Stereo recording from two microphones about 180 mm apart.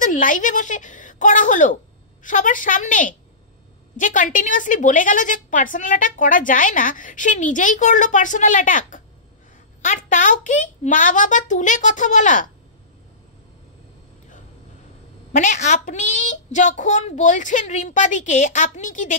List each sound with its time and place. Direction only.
0.0 s a woman's voice: 45° left (ahead or behind)
15.3 s a woman's voice: 40° left (ahead or behind)